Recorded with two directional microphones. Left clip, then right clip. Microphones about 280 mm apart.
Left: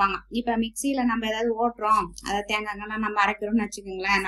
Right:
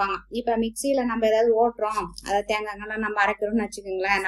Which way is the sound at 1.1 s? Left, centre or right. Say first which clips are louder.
Right 6 dB; left.